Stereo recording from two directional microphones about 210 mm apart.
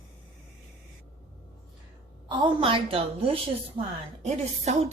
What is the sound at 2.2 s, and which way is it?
A woman's voice, 25° right (ahead or behind).